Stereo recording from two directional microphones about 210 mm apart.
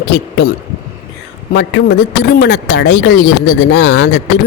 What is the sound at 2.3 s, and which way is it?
Speech, 55° left (ahead or behind).